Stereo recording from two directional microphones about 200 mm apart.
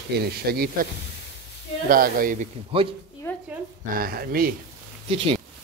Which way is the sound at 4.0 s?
45° right (ahead or behind).